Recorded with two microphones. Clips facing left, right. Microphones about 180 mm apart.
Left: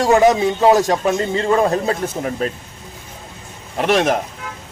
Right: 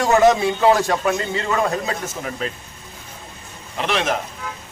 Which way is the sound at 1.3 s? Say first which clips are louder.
Left 5 dB; 30° left (ahead or behind).